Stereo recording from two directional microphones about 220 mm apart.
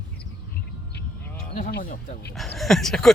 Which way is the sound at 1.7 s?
45° left (ahead or behind).